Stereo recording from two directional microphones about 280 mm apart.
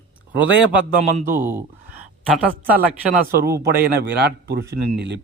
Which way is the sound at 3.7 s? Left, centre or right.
Right.